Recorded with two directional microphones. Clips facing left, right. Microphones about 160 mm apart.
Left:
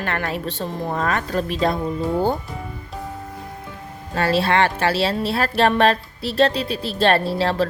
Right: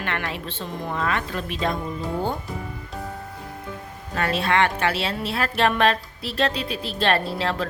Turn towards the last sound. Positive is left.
turn(degrees=35)  # may be behind; listen again after turning